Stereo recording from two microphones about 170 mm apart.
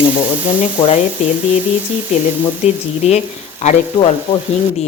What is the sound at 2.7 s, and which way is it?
A woman's voice, 40° left (ahead or behind).